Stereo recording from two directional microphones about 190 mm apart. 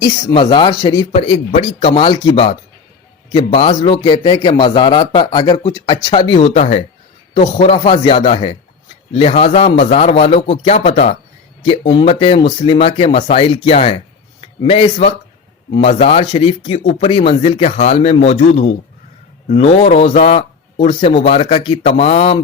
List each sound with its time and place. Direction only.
0.0 s a man's voice: 25° left (ahead or behind)